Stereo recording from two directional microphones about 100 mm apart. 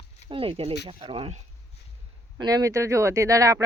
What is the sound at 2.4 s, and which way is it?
Speech, 35° right (ahead or behind).